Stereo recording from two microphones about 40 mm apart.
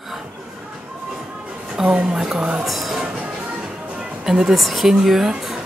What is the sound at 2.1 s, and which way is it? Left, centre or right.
Speech, centre.